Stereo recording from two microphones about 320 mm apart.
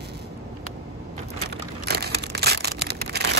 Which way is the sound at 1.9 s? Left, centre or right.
Right.